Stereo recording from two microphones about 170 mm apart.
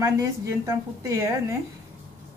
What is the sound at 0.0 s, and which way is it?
A woman's voice, 20° right (ahead or behind).